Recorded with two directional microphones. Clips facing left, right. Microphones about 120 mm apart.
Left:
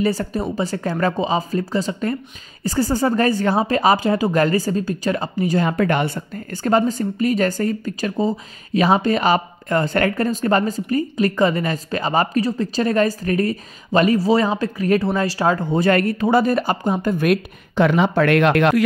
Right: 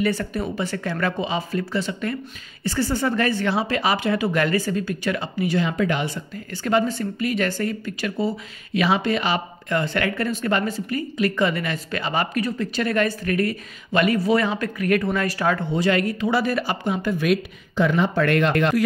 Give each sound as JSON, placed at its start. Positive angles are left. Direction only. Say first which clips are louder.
{"t": 0.0, "sound": "speech", "louder": "left 3 dB", "side_deg": 35}
{"t": 15.7, "sound": "speech", "louder": "left 4 dB", "side_deg": 50}